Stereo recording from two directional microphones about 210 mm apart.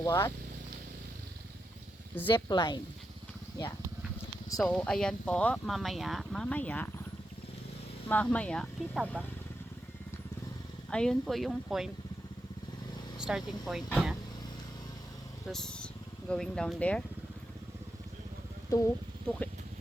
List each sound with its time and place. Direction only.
0.0 s speech: 15° left (ahead or behind)
2.2 s speech: 20° left (ahead or behind)
4.5 s speech: centre (ahead or behind)
8.0 s speech: 5° left (ahead or behind)
10.9 s speech: 5° left (ahead or behind)
13.1 s speech: 5° right (ahead or behind)
15.4 s speech: centre (ahead or behind)
18.7 s speech: 15° left (ahead or behind)